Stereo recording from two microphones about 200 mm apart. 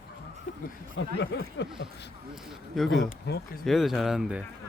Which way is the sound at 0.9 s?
60° left (ahead or behind).